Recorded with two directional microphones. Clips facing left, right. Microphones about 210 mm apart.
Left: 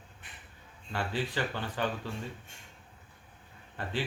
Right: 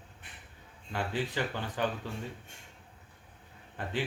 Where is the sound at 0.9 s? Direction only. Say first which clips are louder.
Even; 15° right (ahead or behind).